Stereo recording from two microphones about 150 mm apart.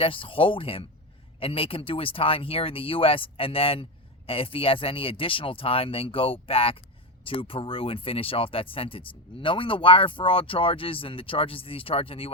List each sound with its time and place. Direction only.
0.0 s speech: 35° left (ahead or behind)